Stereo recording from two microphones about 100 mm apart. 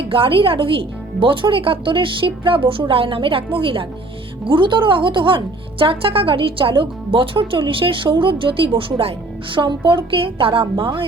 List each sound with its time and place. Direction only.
0.1 s speech: 65° right (ahead or behind)
9.6 s speech: 55° right (ahead or behind)